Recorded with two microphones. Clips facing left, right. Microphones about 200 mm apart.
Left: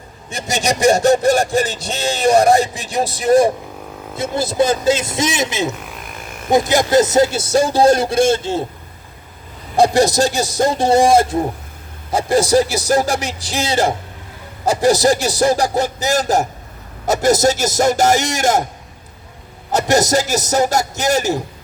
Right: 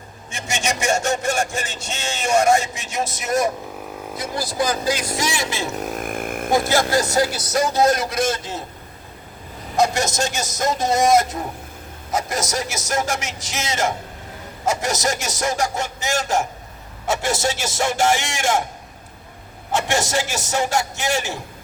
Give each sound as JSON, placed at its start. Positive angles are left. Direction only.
{"t": 0.3, "sound": "speech", "side_deg": 35}
{"t": 5.7, "sound": "a sound", "side_deg": -45}
{"t": 6.5, "sound": "speech", "side_deg": 20}
{"t": 9.7, "sound": "speech", "side_deg": 35}
{"t": 19.7, "sound": "speech", "side_deg": 40}